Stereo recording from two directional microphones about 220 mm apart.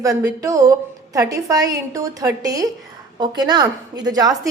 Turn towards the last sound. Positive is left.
turn(degrees=-15)  # may be behind; listen again after turning